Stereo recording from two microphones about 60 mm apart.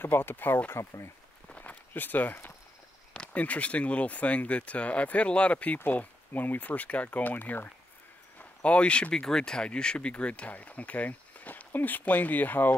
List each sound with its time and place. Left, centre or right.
0.0 s speech: left
0.7 s speech: left
1.5 s walk: left
3.1 s speech: left
5.9 s speech: left
8.4 s speech: centre